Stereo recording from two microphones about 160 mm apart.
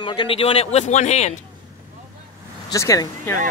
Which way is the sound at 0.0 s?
30° left (ahead or behind).